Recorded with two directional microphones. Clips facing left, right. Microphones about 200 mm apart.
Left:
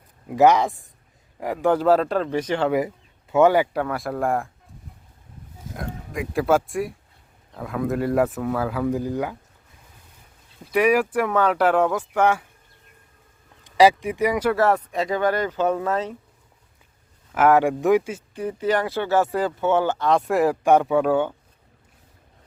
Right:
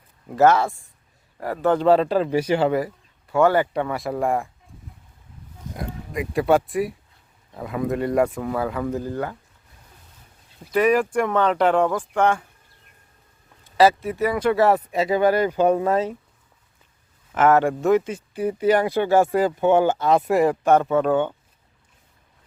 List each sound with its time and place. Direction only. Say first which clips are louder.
0.3 s speech: even; 15° left (ahead or behind); by 2.7 s 5° right (ahead or behind)
2.7 s speech: left 1 dB; 20° left (ahead or behind); by 4.4 s centre (ahead or behind)
5.7 s speech: right 1 dB; centre (ahead or behind)
10.8 s speech: even; 10° left (ahead or behind)
13.7 s speech: left 1 dB; 15° left (ahead or behind); by 16.1 s 10° right (ahead or behind)
17.3 s speech: even; 10° left (ahead or behind)
18.3 s speech: right 4 dB; 10° right (ahead or behind); by 21.3 s 5° left (ahead or behind)